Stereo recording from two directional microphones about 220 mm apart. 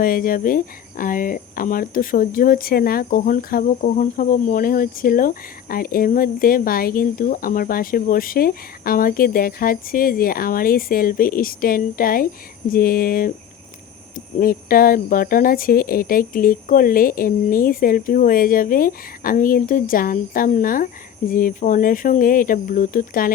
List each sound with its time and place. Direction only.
0.0 s speech: 40° left (ahead or behind)
14.3 s speech: 40° left (ahead or behind)